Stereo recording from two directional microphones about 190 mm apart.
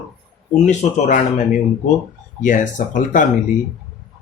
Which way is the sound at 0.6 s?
35° left (ahead or behind).